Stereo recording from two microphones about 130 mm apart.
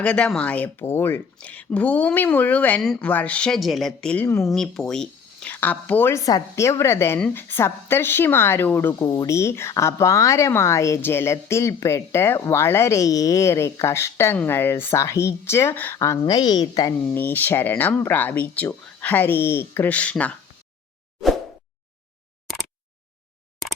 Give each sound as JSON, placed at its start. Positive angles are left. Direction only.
{"t": 0.0, "sound": "speech", "side_deg": 10}
{"t": 9.0, "sound": "speech", "side_deg": 25}
{"t": 16.2, "sound": "a woman's voice", "side_deg": 35}
{"t": 17.2, "sound": "speech", "side_deg": 15}